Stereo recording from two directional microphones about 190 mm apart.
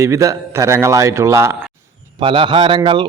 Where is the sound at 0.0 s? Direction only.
15° right (ahead or behind).